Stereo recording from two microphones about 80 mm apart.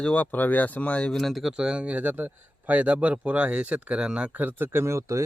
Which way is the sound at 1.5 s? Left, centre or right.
Centre.